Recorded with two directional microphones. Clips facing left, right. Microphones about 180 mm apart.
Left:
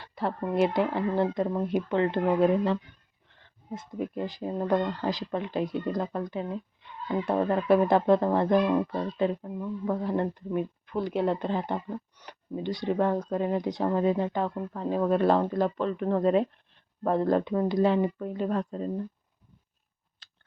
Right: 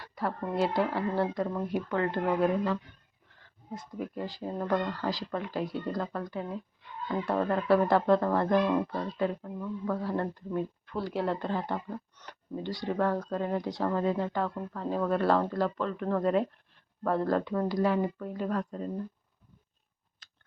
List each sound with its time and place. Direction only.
0.0 s speech: 25° left (ahead or behind)
3.8 s speech: 20° left (ahead or behind)
20.2 s a sound: 30° left (ahead or behind)